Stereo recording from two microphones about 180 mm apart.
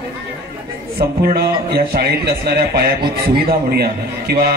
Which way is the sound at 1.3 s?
65° right (ahead or behind).